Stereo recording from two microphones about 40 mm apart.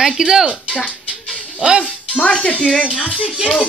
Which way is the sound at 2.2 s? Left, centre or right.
Left.